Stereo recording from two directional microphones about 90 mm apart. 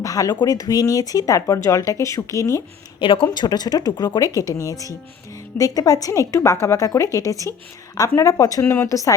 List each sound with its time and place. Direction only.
0.0 s speech: 40° left (ahead or behind)
3.0 s speech: 75° left (ahead or behind)
3.2 s speech: 50° left (ahead or behind)
8.6 s speech: 30° left (ahead or behind)